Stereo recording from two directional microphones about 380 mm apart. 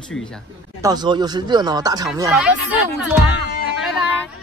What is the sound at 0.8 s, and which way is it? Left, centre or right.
Speech, centre.